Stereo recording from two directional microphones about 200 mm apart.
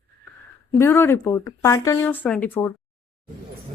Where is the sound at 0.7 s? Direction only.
10° left (ahead or behind).